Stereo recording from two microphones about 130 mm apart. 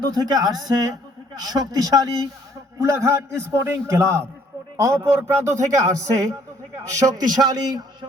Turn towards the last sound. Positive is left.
turn(degrees=-30)  # may be behind; listen again after turning